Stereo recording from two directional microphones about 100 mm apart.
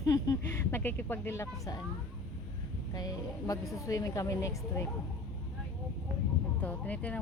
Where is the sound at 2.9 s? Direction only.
40° left (ahead or behind).